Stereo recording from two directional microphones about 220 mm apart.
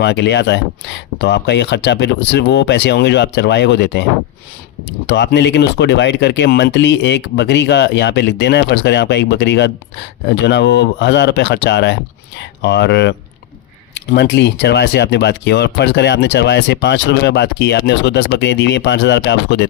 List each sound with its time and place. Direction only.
0.0 s speech: 55° left (ahead or behind)
5.0 s speech: 55° left (ahead or behind)